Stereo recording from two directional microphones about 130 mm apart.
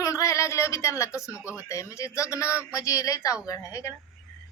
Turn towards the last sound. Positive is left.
turn(degrees=25)  # may be behind; listen again after turning